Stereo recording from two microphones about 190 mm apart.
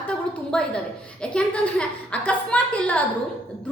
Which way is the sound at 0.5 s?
5° left (ahead or behind).